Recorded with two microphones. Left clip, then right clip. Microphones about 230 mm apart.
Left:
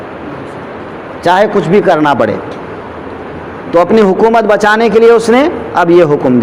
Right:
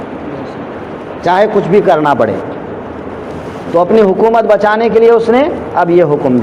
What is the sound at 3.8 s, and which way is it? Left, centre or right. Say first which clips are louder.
A man's voice: left 1 dB; left.